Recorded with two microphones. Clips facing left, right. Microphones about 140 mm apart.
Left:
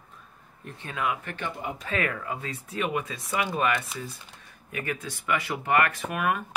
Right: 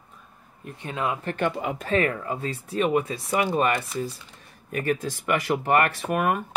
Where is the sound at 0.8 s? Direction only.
30° right (ahead or behind); by 5.4 s 45° right (ahead or behind).